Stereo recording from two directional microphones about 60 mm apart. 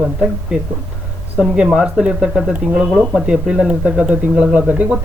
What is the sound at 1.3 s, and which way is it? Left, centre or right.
Speech, centre.